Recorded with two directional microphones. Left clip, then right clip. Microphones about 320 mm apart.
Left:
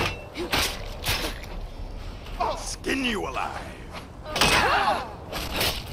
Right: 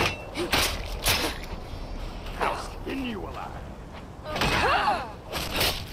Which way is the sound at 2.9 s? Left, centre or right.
Left.